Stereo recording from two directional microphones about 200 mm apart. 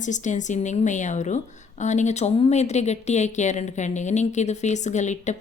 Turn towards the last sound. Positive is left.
turn(degrees=35)  # may be behind; listen again after turning